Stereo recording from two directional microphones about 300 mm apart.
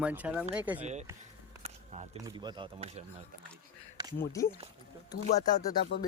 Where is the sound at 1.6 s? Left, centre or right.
Right.